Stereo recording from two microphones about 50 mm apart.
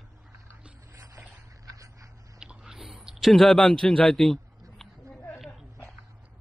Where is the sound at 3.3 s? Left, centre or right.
Centre.